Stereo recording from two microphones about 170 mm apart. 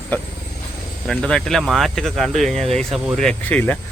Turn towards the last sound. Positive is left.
turn(degrees=10)  # may be behind; listen again after turning